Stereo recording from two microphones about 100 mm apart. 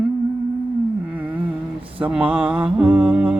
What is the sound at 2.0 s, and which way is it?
Mantra, 10° right (ahead or behind).